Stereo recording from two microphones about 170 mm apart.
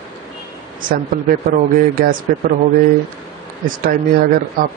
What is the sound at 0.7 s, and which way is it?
Speech, 50° right (ahead or behind).